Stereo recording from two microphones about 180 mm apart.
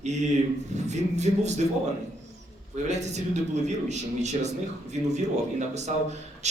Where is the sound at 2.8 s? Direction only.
40° right (ahead or behind).